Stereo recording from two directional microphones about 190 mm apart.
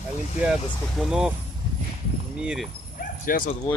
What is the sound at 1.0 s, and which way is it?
Speech, 5° right (ahead or behind).